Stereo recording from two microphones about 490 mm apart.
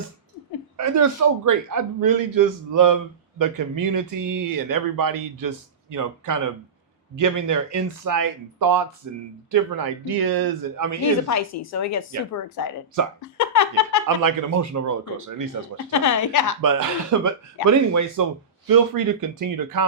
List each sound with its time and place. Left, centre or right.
1.5 s a man's voice: right
11.0 s speech: left
13.2 s a sound: left
14.2 s a man's voice: right
15.9 s speech: left
16.6 s a man's voice: right